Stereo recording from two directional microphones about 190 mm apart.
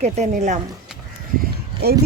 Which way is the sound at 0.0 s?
35° right (ahead or behind).